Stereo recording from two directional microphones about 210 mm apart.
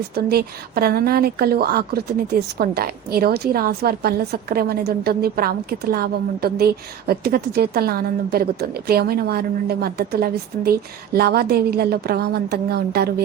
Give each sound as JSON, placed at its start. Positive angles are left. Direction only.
{"t": 0.3, "sound": "a woman's voice", "side_deg": -45}